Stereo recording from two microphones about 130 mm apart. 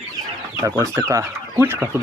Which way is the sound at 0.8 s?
25° right (ahead or behind).